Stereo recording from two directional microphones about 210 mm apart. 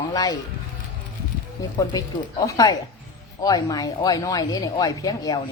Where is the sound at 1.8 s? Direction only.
15° left (ahead or behind).